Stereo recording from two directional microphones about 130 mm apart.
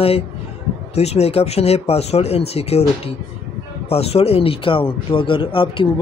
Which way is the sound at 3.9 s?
50° left (ahead or behind).